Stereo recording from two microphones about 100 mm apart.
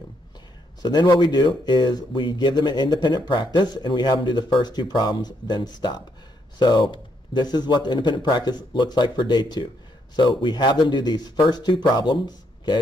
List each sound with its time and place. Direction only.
0.8 s speech: 45° left (ahead or behind)